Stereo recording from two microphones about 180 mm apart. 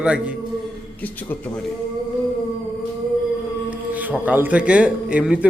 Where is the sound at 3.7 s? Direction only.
10° right (ahead or behind).